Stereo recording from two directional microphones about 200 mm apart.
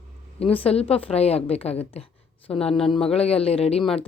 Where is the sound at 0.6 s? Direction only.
30° left (ahead or behind).